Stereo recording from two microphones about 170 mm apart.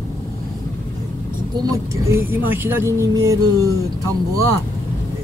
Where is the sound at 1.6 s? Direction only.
15° right (ahead or behind).